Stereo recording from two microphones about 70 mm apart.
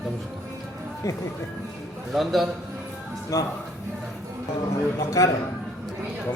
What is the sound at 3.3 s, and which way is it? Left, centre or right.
Speech, left.